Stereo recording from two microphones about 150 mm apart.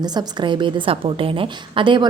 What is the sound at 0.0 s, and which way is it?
A woman's voice, 30° right (ahead or behind).